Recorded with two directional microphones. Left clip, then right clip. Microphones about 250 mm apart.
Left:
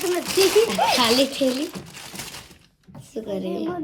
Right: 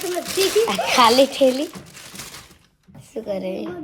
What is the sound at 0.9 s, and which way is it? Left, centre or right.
Speech, right.